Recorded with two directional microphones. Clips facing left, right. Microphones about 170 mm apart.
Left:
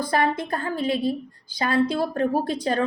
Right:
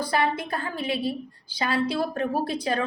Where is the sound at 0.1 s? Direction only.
45° left (ahead or behind).